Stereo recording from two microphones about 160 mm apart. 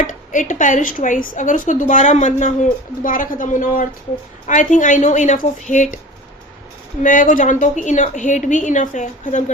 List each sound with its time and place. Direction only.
0.0 s speech: 55° left (ahead or behind)
7.0 s speech: 55° left (ahead or behind)